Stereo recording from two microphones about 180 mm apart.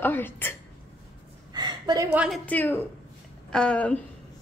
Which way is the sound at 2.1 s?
5° right (ahead or behind).